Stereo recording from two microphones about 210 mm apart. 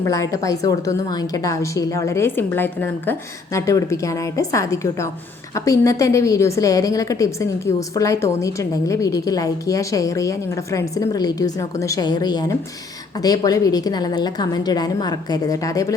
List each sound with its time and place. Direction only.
0.0 s a woman's voice: 15° left (ahead or behind)